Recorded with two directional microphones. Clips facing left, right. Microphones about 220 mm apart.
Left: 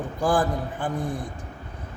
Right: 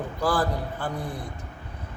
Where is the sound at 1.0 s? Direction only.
45° left (ahead or behind).